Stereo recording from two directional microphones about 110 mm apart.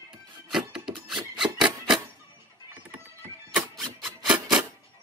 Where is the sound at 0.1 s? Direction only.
5° right (ahead or behind).